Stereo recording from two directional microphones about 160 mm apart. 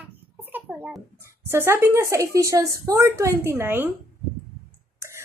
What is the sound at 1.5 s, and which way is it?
A woman's voice, 15° right (ahead or behind).